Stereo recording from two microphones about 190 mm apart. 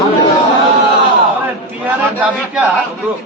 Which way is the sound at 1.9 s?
10° right (ahead or behind).